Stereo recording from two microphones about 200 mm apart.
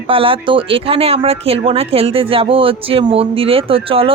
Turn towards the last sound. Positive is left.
turn(degrees=-25)  # may be behind; listen again after turning